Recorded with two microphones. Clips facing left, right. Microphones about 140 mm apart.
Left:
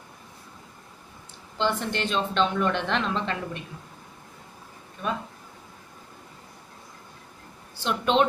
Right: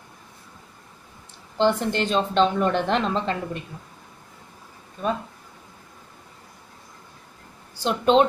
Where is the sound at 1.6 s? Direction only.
40° right (ahead or behind).